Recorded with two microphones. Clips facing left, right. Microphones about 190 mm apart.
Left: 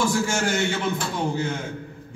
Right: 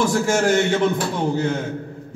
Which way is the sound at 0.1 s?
40° right (ahead or behind).